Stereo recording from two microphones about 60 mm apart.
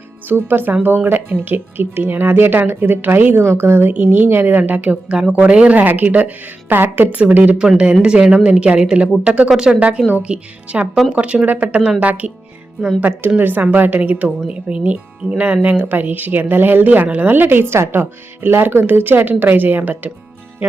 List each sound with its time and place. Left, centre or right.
0.3 s a woman's voice: right
7.6 s a woman's voice: centre